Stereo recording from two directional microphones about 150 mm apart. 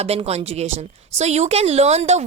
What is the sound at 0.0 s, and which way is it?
Speech, 45° right (ahead or behind).